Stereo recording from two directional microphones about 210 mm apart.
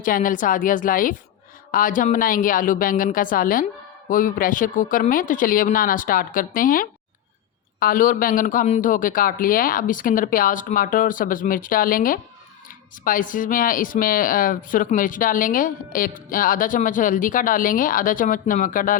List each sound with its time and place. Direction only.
0.0 s speech: 40° left (ahead or behind)